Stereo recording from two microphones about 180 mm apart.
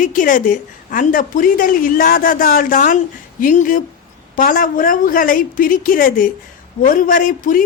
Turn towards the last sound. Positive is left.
turn(degrees=50)  # may be behind; listen again after turning